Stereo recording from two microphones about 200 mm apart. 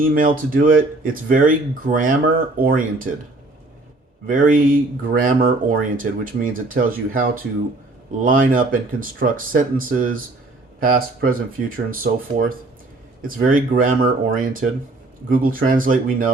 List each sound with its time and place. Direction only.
0.0 s speech: 45° right (ahead or behind)
4.3 s speech: 40° right (ahead or behind)